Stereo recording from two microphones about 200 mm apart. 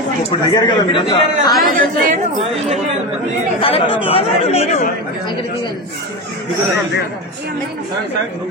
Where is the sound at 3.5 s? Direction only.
25° left (ahead or behind).